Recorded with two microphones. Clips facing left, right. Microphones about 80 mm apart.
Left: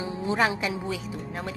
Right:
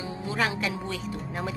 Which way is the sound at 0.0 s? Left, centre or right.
Left.